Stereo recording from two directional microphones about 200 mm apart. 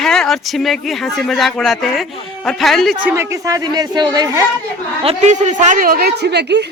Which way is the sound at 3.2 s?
15° right (ahead or behind).